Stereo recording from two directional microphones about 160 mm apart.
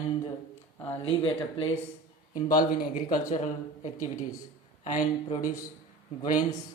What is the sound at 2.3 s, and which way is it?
Speech, 55° left (ahead or behind).